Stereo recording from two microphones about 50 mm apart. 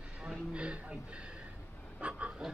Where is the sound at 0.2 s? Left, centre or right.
Right.